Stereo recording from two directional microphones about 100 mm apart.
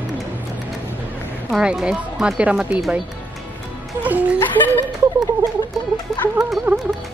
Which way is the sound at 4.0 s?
15° right (ahead or behind).